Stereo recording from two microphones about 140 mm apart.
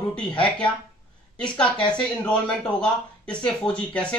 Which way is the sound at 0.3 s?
35° left (ahead or behind).